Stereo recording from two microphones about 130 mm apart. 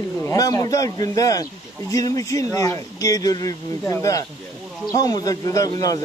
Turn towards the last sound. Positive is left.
turn(degrees=25)  # may be behind; listen again after turning